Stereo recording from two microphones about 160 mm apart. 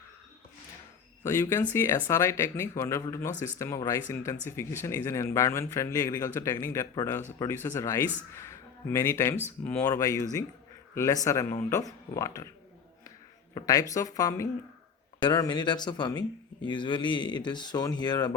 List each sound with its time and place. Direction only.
1.2 s a man's voice: 15° left (ahead or behind)